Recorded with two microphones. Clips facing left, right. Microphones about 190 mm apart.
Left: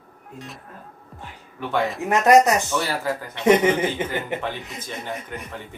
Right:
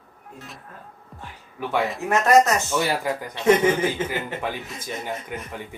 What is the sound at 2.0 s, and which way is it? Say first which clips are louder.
Speech: left 2 dB; 15° left (ahead or behind).